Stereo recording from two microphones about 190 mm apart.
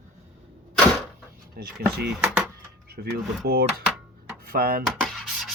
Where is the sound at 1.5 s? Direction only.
60° right (ahead or behind).